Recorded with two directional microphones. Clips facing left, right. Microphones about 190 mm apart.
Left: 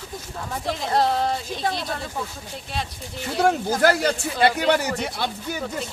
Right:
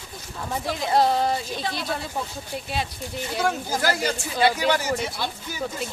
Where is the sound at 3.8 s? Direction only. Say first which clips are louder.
Left 6 dB; 60° left (ahead or behind).